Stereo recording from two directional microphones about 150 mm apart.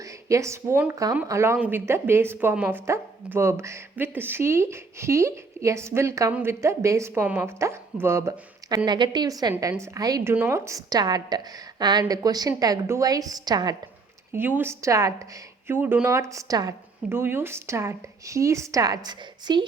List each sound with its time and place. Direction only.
0.0 s a woman's voice: 20° right (ahead or behind)
14.3 s speech: 15° right (ahead or behind)